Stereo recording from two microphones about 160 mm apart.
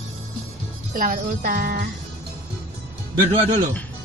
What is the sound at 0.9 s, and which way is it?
Music, 55° right (ahead or behind).